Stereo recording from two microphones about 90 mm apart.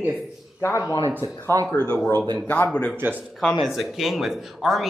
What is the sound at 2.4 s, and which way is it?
Speech, 15° left (ahead or behind).